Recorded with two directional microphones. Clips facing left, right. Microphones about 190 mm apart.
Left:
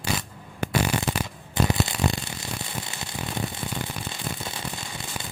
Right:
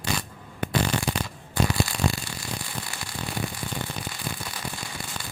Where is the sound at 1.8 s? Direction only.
20° left (ahead or behind).